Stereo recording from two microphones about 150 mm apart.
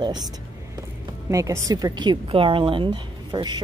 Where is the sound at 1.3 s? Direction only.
20° right (ahead or behind).